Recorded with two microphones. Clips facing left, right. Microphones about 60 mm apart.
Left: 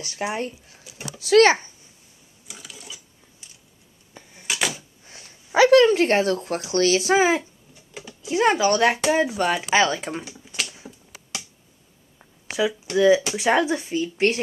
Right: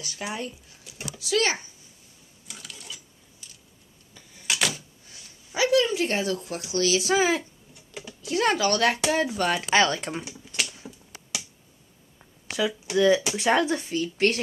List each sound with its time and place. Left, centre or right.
0.0 s speech: left
1.2 s a child's voice: left
2.4 s sewing machine: centre
4.1 s a sound: left
4.5 s door: centre
5.0 s dog: left
5.5 s speech: left
8.2 s speech: centre
12.2 s a sound: centre
12.9 s speech: centre